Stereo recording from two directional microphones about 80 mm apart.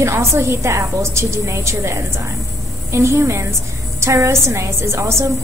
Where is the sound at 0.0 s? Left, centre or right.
Right.